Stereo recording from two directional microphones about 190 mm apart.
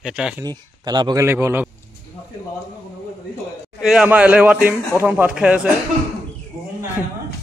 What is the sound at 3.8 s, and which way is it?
Speech, 5° right (ahead or behind).